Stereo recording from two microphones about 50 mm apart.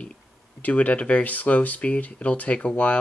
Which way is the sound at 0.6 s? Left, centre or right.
Left.